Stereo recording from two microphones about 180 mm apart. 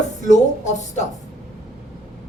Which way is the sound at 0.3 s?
40° left (ahead or behind).